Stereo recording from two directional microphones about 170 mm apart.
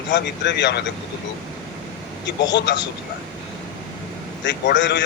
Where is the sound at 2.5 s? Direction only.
90° left.